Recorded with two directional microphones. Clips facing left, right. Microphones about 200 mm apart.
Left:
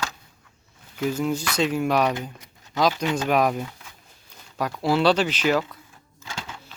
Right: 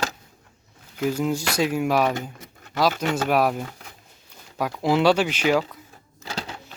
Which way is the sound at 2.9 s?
50° right (ahead or behind).